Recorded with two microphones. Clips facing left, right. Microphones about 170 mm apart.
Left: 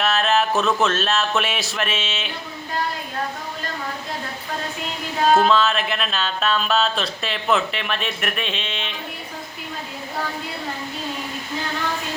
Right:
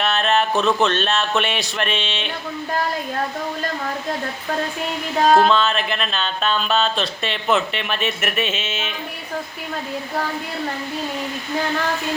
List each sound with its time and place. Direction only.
0.0 s speech: centre (ahead or behind)
5.2 s music: 40° right (ahead or behind)
5.5 s speech: centre (ahead or behind)